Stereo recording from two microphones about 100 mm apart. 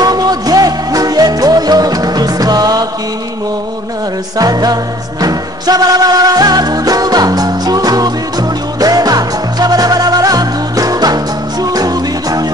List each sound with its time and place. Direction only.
0.0 s music: 40° right (ahead or behind)
4.4 s music: 40° right (ahead or behind)